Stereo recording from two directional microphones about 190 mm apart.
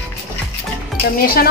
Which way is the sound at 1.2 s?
55° left (ahead or behind).